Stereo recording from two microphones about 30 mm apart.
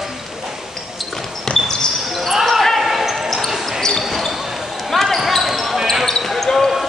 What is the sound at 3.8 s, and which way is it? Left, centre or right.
Basketball bounce, centre.